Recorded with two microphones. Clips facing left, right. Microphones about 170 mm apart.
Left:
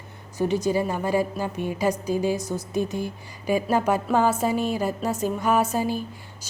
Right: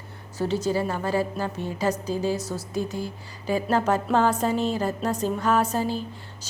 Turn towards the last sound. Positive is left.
turn(degrees=10)  # may be behind; listen again after turning